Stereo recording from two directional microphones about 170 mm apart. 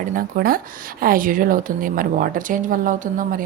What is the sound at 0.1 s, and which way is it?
Speech, 55° right (ahead or behind).